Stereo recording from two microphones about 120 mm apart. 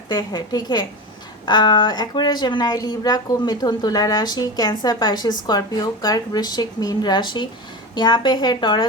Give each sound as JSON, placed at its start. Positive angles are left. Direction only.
{"t": 0.1, "sound": "speech", "side_deg": 35}